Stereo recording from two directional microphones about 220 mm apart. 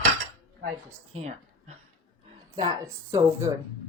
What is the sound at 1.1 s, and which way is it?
Speech, 30° right (ahead or behind).